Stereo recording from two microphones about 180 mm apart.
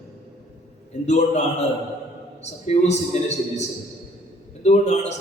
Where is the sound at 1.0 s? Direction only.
40° left (ahead or behind).